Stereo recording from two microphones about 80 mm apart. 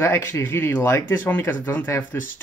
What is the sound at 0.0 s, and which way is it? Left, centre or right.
Speech, left.